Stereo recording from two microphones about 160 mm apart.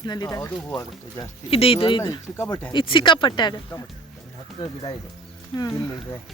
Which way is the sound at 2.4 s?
20° left (ahead or behind).